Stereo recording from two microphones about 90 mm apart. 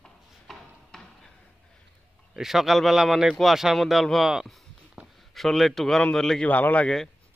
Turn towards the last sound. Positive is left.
turn(degrees=10)  # may be behind; listen again after turning